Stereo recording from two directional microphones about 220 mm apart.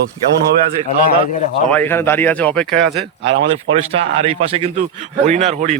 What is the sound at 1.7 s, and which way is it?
Speech, 10° left (ahead or behind).